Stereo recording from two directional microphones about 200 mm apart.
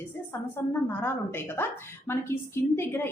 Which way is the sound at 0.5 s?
10° left (ahead or behind).